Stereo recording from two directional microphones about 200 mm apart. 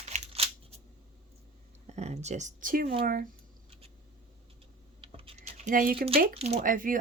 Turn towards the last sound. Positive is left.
turn(degrees=-45)  # may be behind; listen again after turning